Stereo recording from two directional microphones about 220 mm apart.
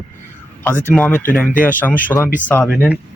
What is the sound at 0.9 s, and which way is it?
Speech, 5° left (ahead or behind).